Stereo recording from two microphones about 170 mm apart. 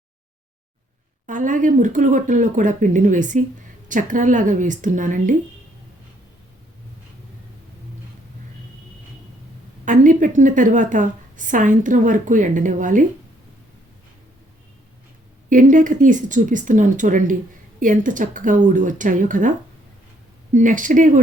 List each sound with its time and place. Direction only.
1.3 s a woman's voice: 50° right (ahead or behind)
9.8 s a woman's voice: 50° right (ahead or behind)
15.4 s a woman's voice: 50° right (ahead or behind)